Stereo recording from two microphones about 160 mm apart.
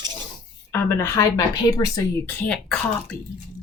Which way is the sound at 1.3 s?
20° left (ahead or behind).